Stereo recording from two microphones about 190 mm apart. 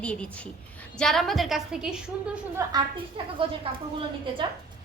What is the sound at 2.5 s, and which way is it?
Speech, 20° right (ahead or behind).